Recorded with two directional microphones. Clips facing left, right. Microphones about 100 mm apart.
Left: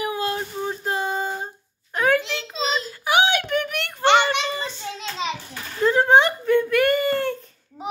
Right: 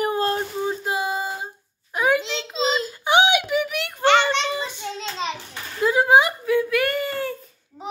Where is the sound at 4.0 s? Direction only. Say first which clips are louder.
Even; 20° left (ahead or behind).